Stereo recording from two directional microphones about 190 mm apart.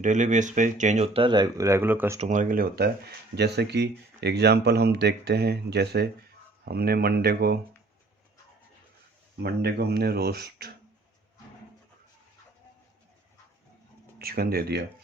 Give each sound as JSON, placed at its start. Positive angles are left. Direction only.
{"t": 0.0, "sound": "speech", "side_deg": -40}
{"t": 2.1, "sound": "speech", "side_deg": -40}
{"t": 9.4, "sound": "speech", "side_deg": -60}
{"t": 14.2, "sound": "speech", "side_deg": -55}